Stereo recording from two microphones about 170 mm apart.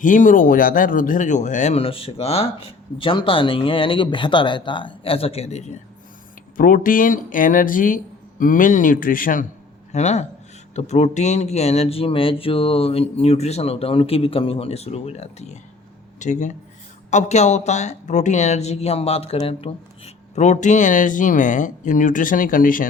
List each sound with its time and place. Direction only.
0.0 s speech: 50° left (ahead or behind)
6.6 s speech: 55° left (ahead or behind)
9.9 s speech: 40° left (ahead or behind)